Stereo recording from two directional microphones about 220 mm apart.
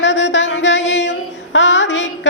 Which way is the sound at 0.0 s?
55° left (ahead or behind).